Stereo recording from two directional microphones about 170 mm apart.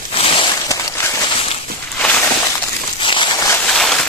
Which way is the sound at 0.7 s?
15° left (ahead or behind).